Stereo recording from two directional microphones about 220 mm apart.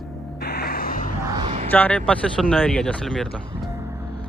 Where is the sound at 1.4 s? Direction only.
25° right (ahead or behind).